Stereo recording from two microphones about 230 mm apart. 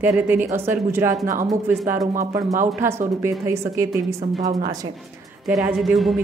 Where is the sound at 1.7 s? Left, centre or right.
Centre.